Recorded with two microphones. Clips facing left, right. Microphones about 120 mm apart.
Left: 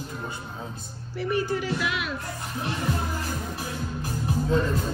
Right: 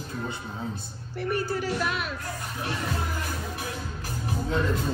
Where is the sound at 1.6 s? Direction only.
40° right (ahead or behind).